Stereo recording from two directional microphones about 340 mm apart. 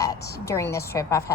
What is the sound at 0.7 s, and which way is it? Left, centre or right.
Speech, centre.